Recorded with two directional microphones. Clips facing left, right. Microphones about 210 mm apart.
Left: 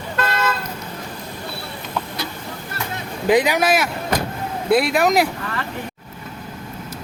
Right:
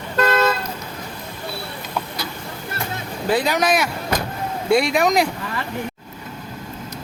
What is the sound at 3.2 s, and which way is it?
Speech, 15° left (ahead or behind).